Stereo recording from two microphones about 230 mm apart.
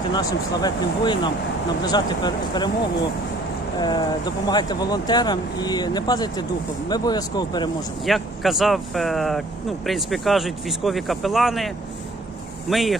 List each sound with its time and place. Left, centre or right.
0.1 s speech: centre
3.8 s speech: centre
8.0 s speech: centre
12.7 s speech: centre